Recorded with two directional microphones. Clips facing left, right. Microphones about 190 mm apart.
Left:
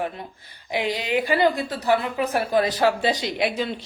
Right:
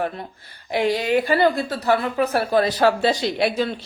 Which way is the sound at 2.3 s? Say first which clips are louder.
Even; 15° left (ahead or behind).